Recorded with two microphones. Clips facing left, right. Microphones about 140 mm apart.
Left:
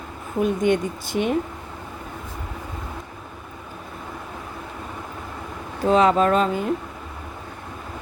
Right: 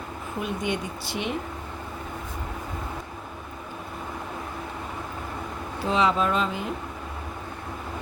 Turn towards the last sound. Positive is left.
turn(degrees=45)  # may be behind; listen again after turning